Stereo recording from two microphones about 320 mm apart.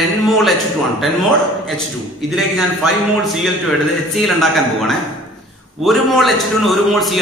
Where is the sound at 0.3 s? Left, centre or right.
Centre.